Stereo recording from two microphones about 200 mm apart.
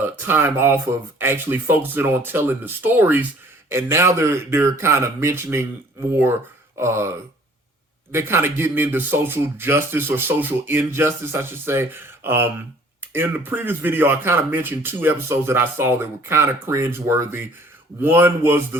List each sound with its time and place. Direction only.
0.0 s speech: 10° right (ahead or behind)
8.1 s speech: 10° right (ahead or behind)